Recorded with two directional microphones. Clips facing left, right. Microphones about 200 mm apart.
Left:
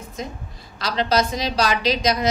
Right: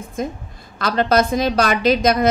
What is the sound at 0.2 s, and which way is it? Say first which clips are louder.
A woman's voice: right 7 dB; 50° right (ahead or behind).